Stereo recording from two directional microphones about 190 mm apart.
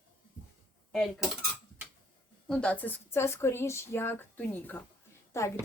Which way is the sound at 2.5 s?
5° left (ahead or behind).